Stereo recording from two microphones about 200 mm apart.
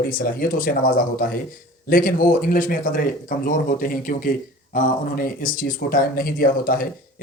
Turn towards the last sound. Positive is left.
turn(degrees=45)  # may be behind; listen again after turning